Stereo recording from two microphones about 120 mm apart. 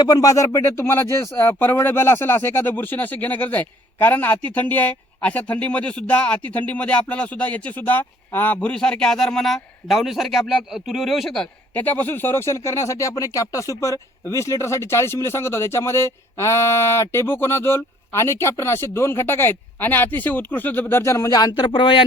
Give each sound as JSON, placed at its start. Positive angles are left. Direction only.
{"t": 0.0, "sound": "speech", "side_deg": 30}
{"t": 11.7, "sound": "speech", "side_deg": 15}